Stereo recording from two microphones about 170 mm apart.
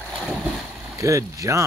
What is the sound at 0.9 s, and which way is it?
Speech, 20° right (ahead or behind).